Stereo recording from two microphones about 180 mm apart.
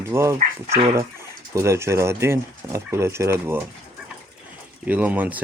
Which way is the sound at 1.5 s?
15° right (ahead or behind).